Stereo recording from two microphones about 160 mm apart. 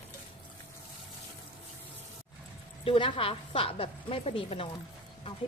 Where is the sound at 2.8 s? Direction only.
35° left (ahead or behind).